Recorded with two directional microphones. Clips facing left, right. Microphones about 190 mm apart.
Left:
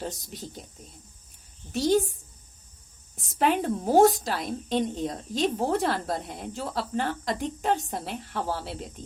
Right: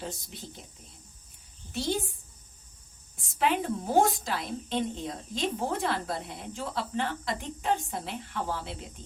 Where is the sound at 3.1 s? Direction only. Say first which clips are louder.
Left 3 dB; 40° left (ahead or behind).